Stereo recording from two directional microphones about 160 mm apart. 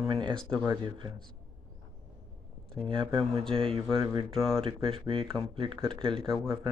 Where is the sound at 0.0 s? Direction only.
30° right (ahead or behind).